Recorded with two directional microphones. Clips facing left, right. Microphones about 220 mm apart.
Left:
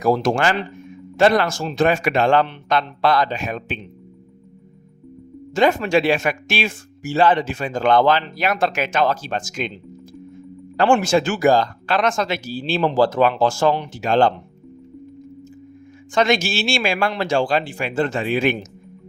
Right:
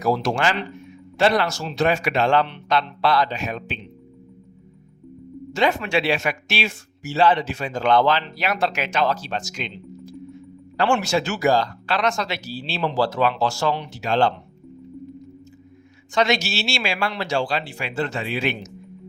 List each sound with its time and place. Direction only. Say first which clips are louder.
0.0 s speech: left 3 dB; 50° left (ahead or behind)
5.5 s speech: left 4 dB; 45° left (ahead or behind)
16.1 s speech: left 3 dB; 50° left (ahead or behind)